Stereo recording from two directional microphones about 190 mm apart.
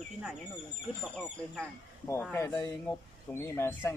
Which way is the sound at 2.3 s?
10° left (ahead or behind).